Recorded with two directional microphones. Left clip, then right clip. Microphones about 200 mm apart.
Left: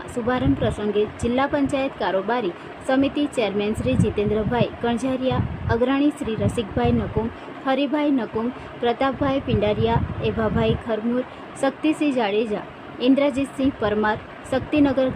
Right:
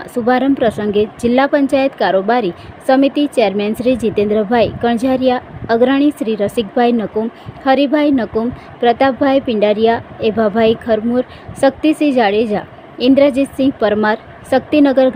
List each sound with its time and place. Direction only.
0.3 s speech: 30° right (ahead or behind)